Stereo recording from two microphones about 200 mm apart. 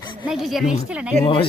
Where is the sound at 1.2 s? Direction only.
25° left (ahead or behind).